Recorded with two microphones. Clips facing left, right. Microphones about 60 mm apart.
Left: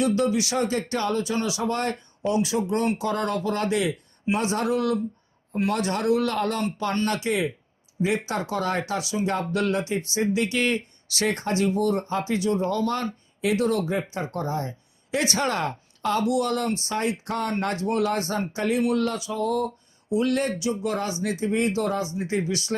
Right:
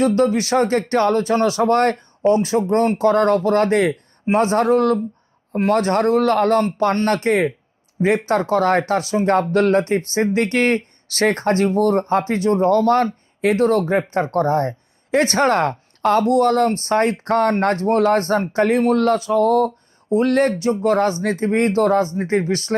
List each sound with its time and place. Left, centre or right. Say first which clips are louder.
0.0 s speech: right 6 dB; right